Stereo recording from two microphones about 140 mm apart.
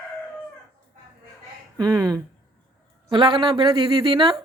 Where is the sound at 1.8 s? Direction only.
25° right (ahead or behind).